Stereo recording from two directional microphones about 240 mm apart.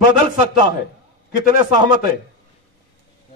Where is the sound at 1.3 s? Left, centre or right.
Centre.